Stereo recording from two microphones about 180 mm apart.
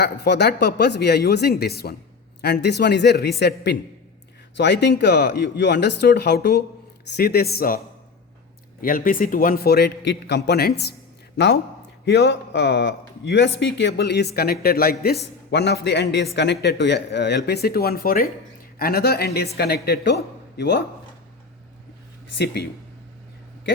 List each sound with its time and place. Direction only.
0.0 s a man's voice: 65° left (ahead or behind)
8.8 s a man's voice: 50° left (ahead or behind)
15.4 s a man's voice: 70° left (ahead or behind)